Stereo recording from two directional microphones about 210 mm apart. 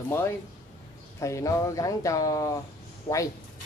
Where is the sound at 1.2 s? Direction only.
15° left (ahead or behind).